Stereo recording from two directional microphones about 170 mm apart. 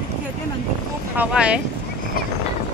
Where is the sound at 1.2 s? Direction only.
5° right (ahead or behind).